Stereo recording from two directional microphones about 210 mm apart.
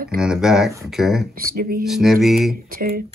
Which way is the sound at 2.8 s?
40° right (ahead or behind).